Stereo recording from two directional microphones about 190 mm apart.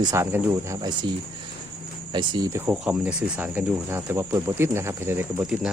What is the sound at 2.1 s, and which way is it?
Speech, 20° right (ahead or behind).